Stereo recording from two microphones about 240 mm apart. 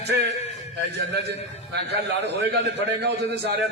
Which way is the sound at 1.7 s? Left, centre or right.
Right.